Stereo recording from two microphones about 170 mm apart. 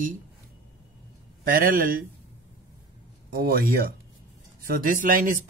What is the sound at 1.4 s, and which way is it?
Speech, 60° right (ahead or behind).